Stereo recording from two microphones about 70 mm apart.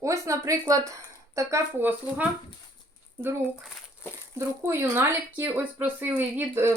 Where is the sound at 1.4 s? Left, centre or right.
Right.